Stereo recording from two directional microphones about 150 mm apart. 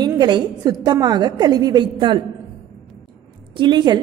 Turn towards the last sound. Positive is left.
turn(degrees=-30)  # may be behind; listen again after turning